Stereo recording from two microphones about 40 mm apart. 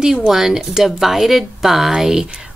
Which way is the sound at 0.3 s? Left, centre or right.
Centre.